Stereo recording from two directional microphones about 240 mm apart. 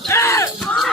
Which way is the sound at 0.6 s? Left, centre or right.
Centre.